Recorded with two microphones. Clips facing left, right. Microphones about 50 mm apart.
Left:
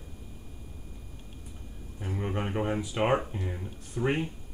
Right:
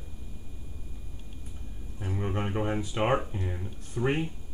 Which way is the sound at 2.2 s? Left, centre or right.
Centre.